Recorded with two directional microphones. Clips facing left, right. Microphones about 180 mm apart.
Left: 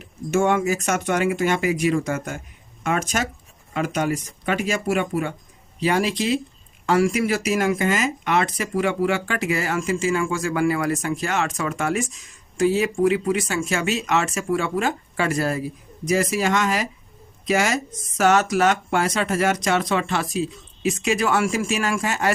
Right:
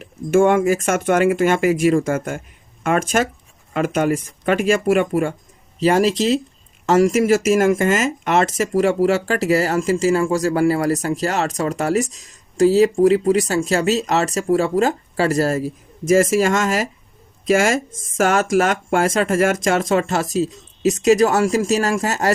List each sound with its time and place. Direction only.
0.3 s speech: 50° right (ahead or behind)